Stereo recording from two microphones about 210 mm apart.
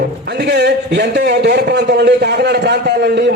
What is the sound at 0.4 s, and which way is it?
A man's voice, 50° right (ahead or behind).